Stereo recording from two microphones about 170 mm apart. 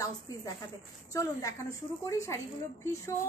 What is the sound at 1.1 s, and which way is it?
A woman's voice, 20° left (ahead or behind).